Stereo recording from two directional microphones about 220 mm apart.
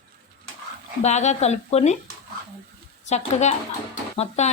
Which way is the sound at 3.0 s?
30° left (ahead or behind).